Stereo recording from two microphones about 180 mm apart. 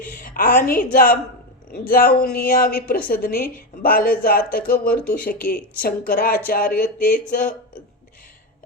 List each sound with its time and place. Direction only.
0.0 s a woman's voice: 50° left (ahead or behind)